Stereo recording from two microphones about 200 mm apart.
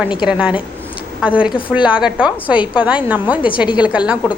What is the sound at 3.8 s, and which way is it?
Speech, 5° right (ahead or behind).